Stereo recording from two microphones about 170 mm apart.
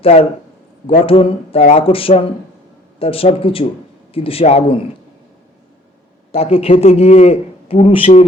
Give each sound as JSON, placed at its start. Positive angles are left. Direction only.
{"t": 0.0, "sound": "a man's voice", "side_deg": 35}
{"t": 6.3, "sound": "a man's voice", "side_deg": 35}